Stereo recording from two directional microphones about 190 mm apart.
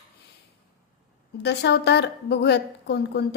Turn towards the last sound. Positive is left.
turn(degrees=60)  # may be behind; listen again after turning